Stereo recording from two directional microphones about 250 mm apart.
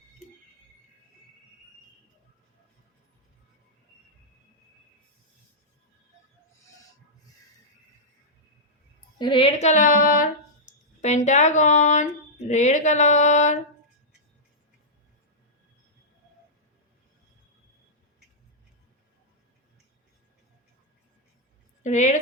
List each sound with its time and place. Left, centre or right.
9.1 s a woman's voice: centre
12.5 s a sound: left
21.8 s a woman's voice: left